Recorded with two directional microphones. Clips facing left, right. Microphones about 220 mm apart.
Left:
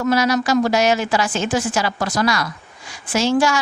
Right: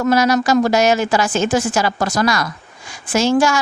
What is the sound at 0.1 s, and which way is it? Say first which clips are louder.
A woman's voice: right 3 dB; 45° right (ahead or behind).